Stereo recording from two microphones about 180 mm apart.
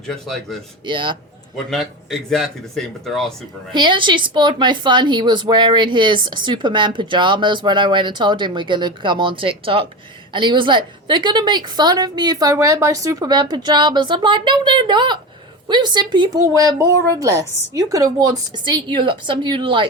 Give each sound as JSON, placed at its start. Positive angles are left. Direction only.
{"t": 0.1, "sound": "speech", "side_deg": 0}
{"t": 0.9, "sound": "a woman's voice", "side_deg": -25}
{"t": 1.7, "sound": "speech", "side_deg": 0}
{"t": 3.7, "sound": "a woman's voice", "side_deg": -25}